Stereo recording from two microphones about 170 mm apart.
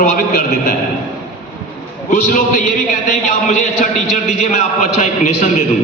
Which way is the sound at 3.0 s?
50° left (ahead or behind).